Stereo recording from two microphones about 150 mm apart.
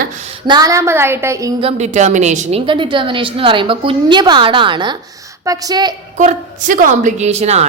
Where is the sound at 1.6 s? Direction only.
45° right (ahead or behind).